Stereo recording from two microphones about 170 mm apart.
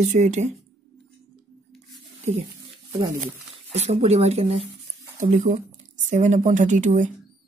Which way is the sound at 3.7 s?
40° right (ahead or behind).